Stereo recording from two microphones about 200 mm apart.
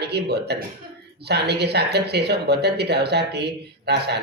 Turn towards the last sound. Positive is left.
turn(degrees=-55)  # may be behind; listen again after turning